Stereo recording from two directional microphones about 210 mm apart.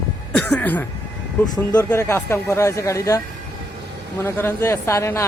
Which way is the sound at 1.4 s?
20° left (ahead or behind).